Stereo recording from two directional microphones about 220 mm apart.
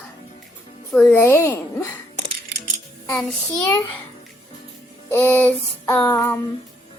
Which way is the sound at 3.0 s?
5° left (ahead or behind).